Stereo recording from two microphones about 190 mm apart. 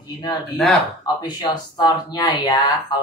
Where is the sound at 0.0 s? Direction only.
20° left (ahead or behind).